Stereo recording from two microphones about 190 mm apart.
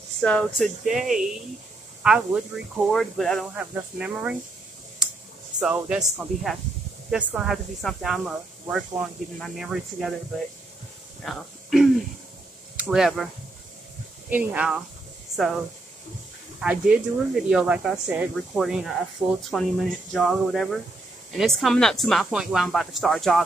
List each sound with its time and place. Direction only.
0.2 s speech: 5° left (ahead or behind)
5.0 s a sound: 5° right (ahead or behind)
5.6 s speech: 5° right (ahead or behind)
11.2 s speech: centre (ahead or behind)
14.3 s speech: 10° right (ahead or behind)
16.6 s speech: 5° right (ahead or behind)